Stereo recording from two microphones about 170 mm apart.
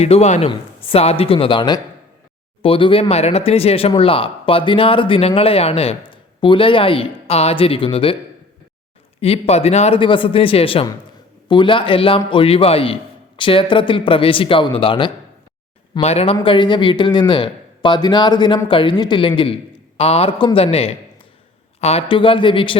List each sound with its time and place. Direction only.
0.0 s speech: 40° left (ahead or behind)
9.2 s a man's voice: 35° left (ahead or behind)